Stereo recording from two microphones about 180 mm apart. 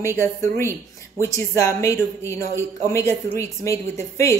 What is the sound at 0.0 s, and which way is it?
Speech, 15° left (ahead or behind).